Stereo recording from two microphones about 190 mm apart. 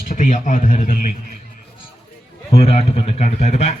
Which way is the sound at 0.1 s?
40° left (ahead or behind).